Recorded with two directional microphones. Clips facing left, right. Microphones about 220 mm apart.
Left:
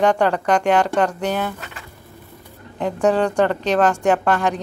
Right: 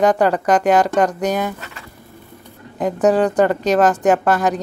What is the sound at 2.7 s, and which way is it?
Speech, 5° right (ahead or behind).